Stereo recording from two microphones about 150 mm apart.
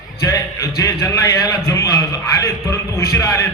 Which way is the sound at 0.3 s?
20° left (ahead or behind).